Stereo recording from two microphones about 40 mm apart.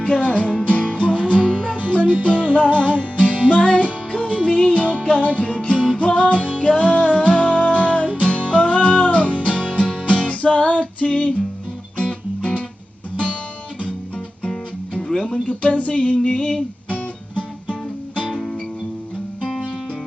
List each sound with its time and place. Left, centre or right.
0.0 s speech: left
0.7 s music: left
6.0 s speech: left
6.5 s music: left
15.0 s music: centre
15.4 s speech: left
16.1 s music: left